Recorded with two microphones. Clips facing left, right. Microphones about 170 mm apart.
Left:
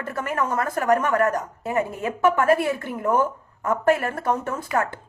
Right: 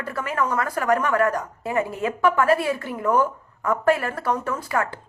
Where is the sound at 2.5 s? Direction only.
50° left (ahead or behind).